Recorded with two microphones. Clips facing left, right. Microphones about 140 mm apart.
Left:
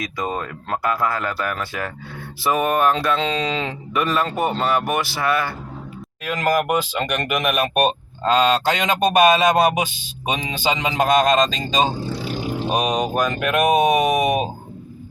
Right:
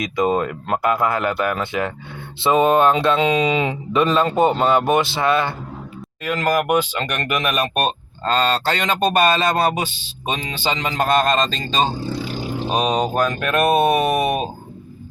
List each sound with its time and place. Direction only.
0.0 s speech: 20° right (ahead or behind)
3.2 s speech: 15° right (ahead or behind)
3.9 s speech: 25° right (ahead or behind)
6.2 s speech: centre (ahead or behind)
11.2 s speech: centre (ahead or behind)